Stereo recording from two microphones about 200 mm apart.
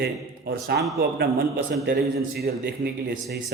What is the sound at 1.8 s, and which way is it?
A man's voice, 50° right (ahead or behind).